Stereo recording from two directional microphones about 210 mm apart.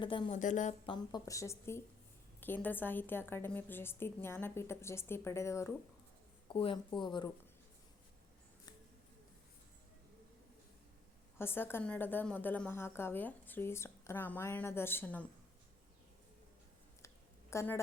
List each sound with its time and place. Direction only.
0.0 s speech: 25° left (ahead or behind)
0.3 s speech: 35° left (ahead or behind)
0.9 s a woman's voice: 15° left (ahead or behind)
6.5 s speech: 25° left (ahead or behind)
11.3 s a woman's voice: 10° left (ahead or behind)
17.5 s a woman's voice: 15° left (ahead or behind)